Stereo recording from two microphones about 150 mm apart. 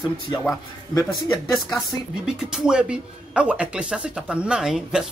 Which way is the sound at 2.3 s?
5° right (ahead or behind).